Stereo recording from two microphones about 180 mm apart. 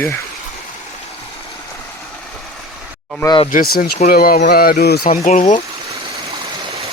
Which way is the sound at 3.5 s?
50° left (ahead or behind).